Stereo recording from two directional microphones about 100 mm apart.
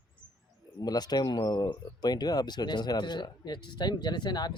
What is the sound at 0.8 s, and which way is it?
Speech, 40° left (ahead or behind).